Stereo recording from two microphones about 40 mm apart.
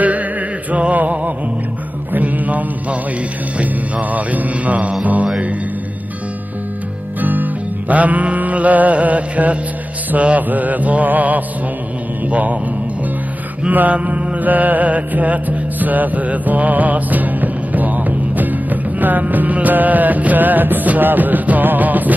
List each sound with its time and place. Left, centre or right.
0.7 s music: right
2.1 s mantra: right
4.1 s mantra: right
5.0 s music: right
7.2 s music: right
7.9 s mantra: right
13.7 s mantra: right